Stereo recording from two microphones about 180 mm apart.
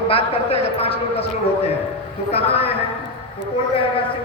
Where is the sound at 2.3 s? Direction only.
35° left (ahead or behind).